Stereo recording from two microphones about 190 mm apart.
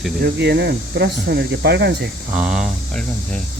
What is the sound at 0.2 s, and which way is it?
Speech, 60° right (ahead or behind).